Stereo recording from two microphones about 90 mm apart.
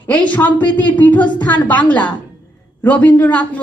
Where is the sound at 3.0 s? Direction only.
15° left (ahead or behind).